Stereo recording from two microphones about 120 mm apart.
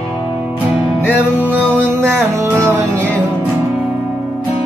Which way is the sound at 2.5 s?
20° right (ahead or behind).